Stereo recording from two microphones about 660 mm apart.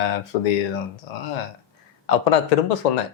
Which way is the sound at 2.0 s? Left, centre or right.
Left.